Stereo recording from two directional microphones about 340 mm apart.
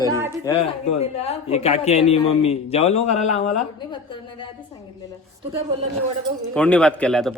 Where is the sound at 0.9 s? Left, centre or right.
Centre.